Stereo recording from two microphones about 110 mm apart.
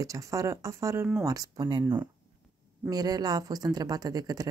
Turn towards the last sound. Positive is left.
turn(degrees=-35)  # may be behind; listen again after turning